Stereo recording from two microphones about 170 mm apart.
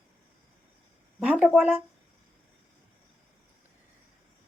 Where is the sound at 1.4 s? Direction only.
10° right (ahead or behind).